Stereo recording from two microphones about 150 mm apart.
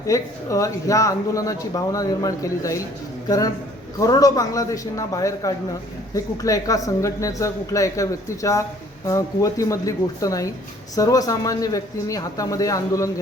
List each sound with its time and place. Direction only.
0.1 s speech: 20° left (ahead or behind)